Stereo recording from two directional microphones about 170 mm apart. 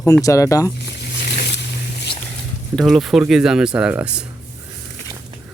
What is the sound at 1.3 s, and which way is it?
Boat, 80° left.